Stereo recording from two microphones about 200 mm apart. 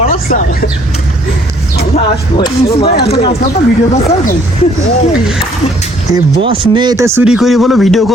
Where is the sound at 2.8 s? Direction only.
55° left (ahead or behind).